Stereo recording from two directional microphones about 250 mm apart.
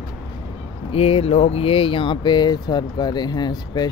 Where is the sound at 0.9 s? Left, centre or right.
Left.